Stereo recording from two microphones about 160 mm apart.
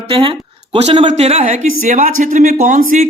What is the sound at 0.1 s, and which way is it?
Speech, 35° right (ahead or behind).